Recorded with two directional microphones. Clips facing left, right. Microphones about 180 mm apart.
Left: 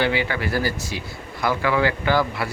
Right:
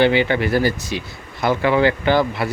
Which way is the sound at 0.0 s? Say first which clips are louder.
Right 7 dB; 25° right (ahead or behind).